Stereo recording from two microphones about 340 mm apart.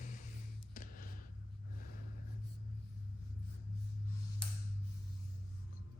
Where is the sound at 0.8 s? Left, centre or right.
Left.